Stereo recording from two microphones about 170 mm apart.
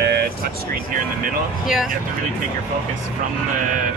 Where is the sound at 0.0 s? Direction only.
65° right (ahead or behind).